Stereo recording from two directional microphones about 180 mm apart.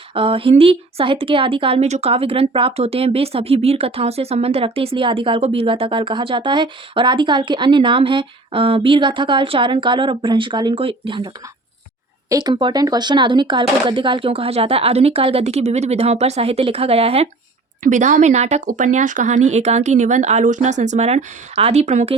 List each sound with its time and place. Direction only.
0.1 s speech: 30° right (ahead or behind)
12.3 s speech: 25° right (ahead or behind)
17.8 s speech: 45° right (ahead or behind)